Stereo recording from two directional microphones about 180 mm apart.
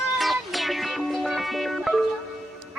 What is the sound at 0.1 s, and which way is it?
Music, centre (ahead or behind).